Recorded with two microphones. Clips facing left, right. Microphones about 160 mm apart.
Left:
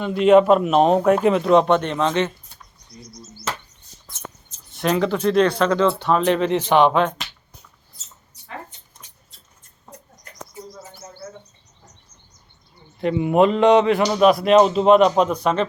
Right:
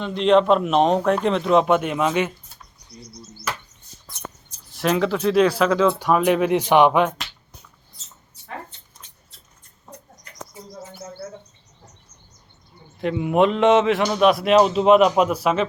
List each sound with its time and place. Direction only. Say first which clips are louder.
0.0 s speech: left 3 dB; 5° left (ahead or behind); by 2.3 s 10° right (ahead or behind)
4.1 s a sound: right 1 dB; 20° left (ahead or behind)
4.7 s speech: even; centre (ahead or behind)
13.0 s speech: left 2 dB; centre (ahead or behind)